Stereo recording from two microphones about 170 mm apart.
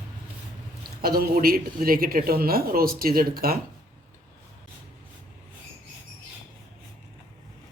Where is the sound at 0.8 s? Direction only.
60° right (ahead or behind).